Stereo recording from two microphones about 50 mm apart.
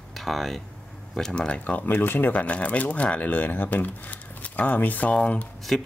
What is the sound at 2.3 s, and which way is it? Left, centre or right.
Speech, left.